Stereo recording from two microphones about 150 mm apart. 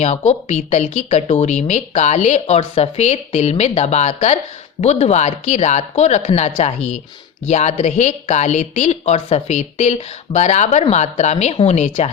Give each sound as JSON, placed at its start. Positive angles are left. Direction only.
{"t": 0.0, "sound": "a woman's voice", "side_deg": 50}